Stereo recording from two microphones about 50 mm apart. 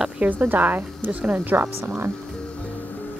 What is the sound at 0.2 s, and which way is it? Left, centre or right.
A woman's voice, right.